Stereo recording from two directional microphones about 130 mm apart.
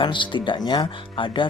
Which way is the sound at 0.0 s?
40° left (ahead or behind).